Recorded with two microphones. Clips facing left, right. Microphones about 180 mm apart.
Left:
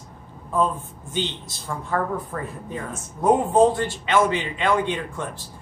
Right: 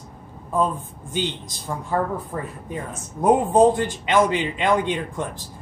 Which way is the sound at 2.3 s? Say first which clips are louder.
Right 1 dB; 10° right (ahead or behind).